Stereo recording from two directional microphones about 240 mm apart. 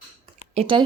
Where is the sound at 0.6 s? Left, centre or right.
Right.